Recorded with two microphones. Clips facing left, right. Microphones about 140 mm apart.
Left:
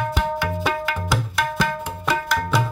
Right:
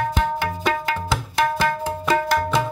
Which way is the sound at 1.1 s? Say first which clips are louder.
Right 4 dB; 25° right (ahead or behind).